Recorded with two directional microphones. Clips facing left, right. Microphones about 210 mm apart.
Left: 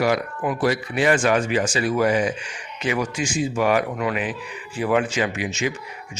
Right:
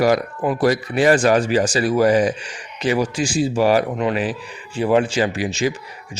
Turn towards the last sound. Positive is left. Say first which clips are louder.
# right 4 dB
turn(degrees=-35)  # may be behind; listen again after turning